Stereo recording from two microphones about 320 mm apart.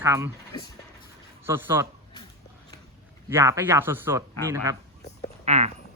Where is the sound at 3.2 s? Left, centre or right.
Centre.